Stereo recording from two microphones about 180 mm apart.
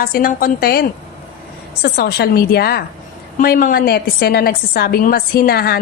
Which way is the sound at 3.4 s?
50° left (ahead or behind).